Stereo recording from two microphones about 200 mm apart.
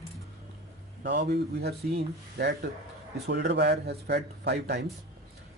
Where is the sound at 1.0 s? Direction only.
60° right (ahead or behind).